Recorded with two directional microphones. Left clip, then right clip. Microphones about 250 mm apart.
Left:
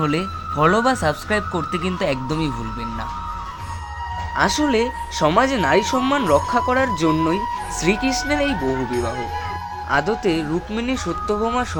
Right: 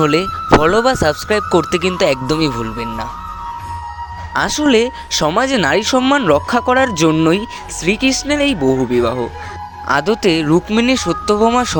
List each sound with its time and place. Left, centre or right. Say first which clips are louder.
0.0 s speech: right 8 dB; right
4.4 s speech: right 5 dB; right